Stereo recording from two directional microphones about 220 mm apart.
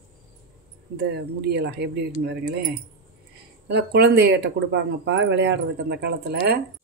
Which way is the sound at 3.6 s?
50° right (ahead or behind).